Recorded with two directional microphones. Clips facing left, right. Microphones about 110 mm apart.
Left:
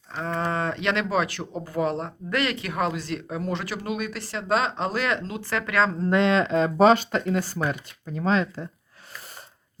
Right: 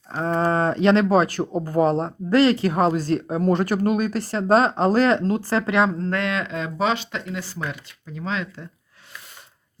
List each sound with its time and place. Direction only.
0.1 s speech: 35° right (ahead or behind)
6.0 s speech: 20° left (ahead or behind); by 8.6 s 40° left (ahead or behind)